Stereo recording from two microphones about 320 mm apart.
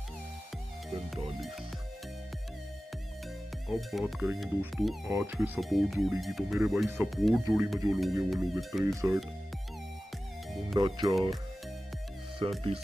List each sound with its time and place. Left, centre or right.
3.6 s speech: centre
10.8 s speech: centre
12.4 s speech: centre